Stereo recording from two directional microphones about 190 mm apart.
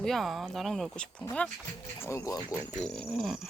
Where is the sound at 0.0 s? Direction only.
Centre (ahead or behind); by 2.6 s 15° left (ahead or behind).